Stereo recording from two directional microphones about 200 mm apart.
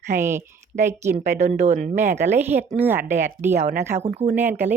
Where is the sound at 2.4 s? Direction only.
10° right (ahead or behind).